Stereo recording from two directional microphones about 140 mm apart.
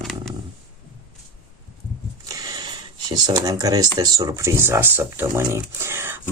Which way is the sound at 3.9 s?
25° right (ahead or behind).